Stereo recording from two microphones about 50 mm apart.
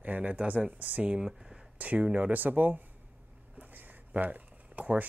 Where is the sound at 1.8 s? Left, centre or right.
Right.